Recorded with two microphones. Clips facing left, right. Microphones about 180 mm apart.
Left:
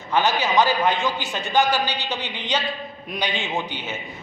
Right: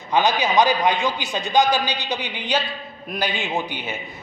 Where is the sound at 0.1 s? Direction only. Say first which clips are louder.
Right 1 dB; 15° right (ahead or behind).